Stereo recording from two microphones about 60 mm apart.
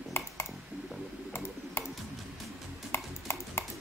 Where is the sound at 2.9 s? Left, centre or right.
Left.